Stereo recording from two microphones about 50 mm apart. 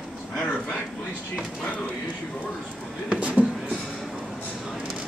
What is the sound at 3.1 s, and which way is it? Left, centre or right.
Speech, right.